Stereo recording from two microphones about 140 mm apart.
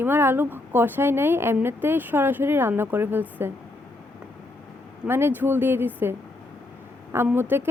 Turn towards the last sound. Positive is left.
turn(degrees=-15)  # may be behind; listen again after turning